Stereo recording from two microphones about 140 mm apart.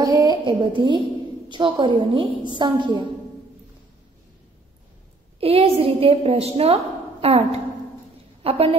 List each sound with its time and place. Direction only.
0.0 s a woman's voice: 25° right (ahead or behind)
5.4 s a woman's voice: 45° right (ahead or behind)